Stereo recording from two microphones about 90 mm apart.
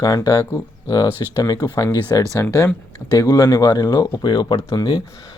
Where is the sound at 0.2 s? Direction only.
35° left (ahead or behind).